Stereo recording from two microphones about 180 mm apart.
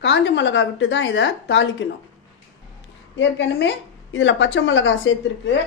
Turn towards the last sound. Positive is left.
turn(degrees=85)